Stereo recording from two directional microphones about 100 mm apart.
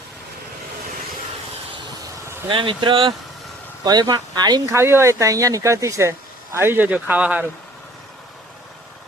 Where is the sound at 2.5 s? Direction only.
55° right (ahead or behind).